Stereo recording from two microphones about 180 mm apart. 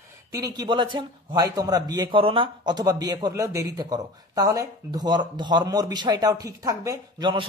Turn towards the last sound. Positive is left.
turn(degrees=-25)  # may be behind; listen again after turning